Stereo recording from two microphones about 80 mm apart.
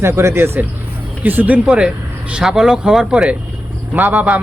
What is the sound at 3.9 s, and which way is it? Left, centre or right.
Speech, right.